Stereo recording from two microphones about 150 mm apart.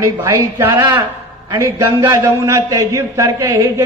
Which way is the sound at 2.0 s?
20° right (ahead or behind).